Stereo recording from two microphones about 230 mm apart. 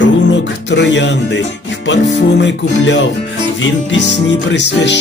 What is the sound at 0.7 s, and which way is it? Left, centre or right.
Speech, left.